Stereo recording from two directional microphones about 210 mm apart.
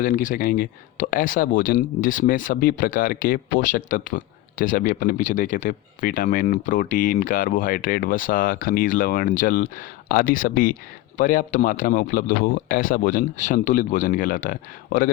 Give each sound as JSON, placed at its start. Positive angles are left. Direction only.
{"t": 0.0, "sound": "speech", "side_deg": 40}